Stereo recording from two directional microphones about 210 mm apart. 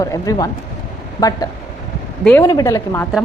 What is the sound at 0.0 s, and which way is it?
A woman's voice, 15° left (ahead or behind).